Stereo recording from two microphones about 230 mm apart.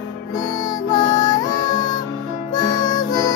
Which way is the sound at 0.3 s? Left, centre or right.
Centre.